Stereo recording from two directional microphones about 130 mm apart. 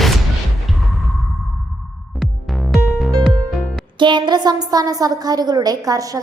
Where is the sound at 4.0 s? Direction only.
35° right (ahead or behind).